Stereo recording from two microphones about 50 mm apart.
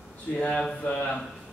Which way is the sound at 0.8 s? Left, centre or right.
Left.